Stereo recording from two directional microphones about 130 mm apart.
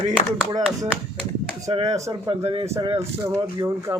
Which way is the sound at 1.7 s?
55° right (ahead or behind).